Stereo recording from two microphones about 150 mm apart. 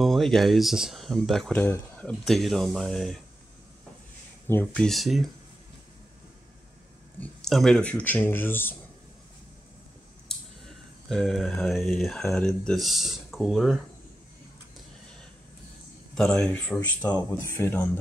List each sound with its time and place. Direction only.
0.0 s speech: centre (ahead or behind)
2.2 s speech: centre (ahead or behind)
4.5 s speech: 15° left (ahead or behind)
4.8 s speech: centre (ahead or behind)
7.2 s speech: 5° left (ahead or behind)
10.2 s a sound: centre (ahead or behind)
12.3 s speech: 10° left (ahead or behind)
16.2 s speech: 5° left (ahead or behind)